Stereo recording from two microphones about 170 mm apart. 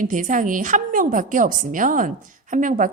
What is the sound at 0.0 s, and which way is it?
A woman's voice, 50° right (ahead or behind).